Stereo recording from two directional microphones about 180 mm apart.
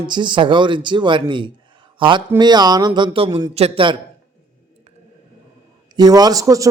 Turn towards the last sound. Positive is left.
turn(degrees=-20)  # may be behind; listen again after turning